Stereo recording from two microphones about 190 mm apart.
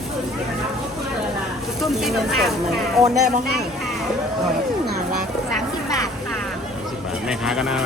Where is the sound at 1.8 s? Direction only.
Centre (ahead or behind).